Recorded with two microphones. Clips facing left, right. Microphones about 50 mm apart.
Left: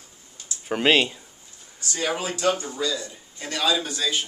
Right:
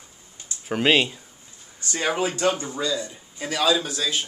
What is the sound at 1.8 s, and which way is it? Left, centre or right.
Speech, right.